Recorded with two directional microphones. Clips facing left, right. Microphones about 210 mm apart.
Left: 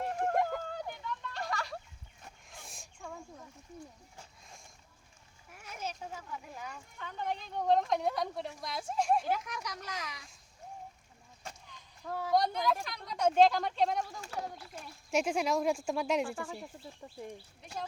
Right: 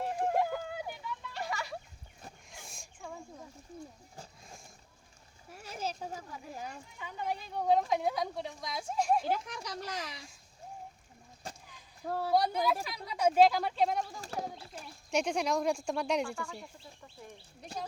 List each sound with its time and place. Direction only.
0.2 s a sound: 5° right (ahead or behind)
5.5 s speech: 30° right (ahead or behind)
6.9 s a woman's voice: 5° right (ahead or behind)
9.3 s speech: 30° right (ahead or behind)
11.4 s a sound: 35° right (ahead or behind)
12.0 s speech: 35° right (ahead or behind)
12.3 s a woman's voice: 5° right (ahead or behind)
16.3 s speech: 20° left (ahead or behind)